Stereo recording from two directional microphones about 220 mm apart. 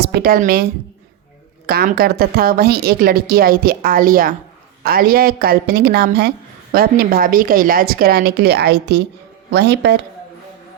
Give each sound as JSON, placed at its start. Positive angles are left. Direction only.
{"t": 0.0, "sound": "a woman's voice", "side_deg": -45}